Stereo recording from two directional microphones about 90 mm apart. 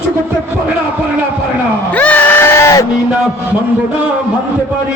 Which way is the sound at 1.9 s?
15° left (ahead or behind).